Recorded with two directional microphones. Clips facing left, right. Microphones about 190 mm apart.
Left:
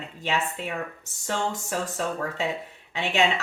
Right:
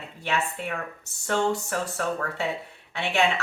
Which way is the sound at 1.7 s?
20° left (ahead or behind).